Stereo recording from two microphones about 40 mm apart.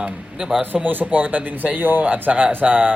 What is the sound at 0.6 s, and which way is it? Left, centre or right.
Speech, right.